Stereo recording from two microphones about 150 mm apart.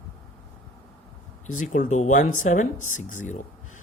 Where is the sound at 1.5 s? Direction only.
60° left (ahead or behind).